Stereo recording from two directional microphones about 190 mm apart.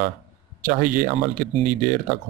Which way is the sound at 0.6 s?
45° right (ahead or behind).